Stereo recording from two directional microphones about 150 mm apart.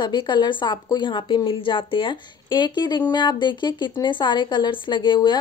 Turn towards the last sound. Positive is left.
turn(degrees=30)  # may be behind; listen again after turning